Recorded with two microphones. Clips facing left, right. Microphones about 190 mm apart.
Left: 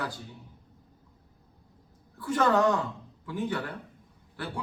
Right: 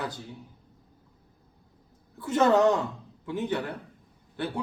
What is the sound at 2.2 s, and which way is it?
A man's voice, 25° right (ahead or behind).